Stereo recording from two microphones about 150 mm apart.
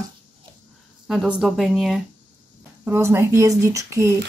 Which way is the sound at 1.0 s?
5° right (ahead or behind).